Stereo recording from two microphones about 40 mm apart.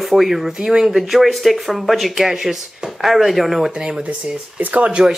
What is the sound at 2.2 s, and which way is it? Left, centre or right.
Speech, centre.